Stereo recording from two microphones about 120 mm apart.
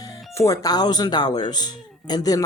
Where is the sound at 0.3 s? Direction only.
25° left (ahead or behind).